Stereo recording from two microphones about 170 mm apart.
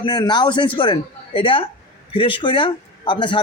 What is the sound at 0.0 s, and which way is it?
A man's voice, 25° left (ahead or behind).